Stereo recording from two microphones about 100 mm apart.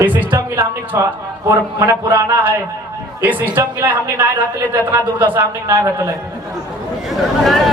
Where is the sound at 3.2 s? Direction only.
20° right (ahead or behind).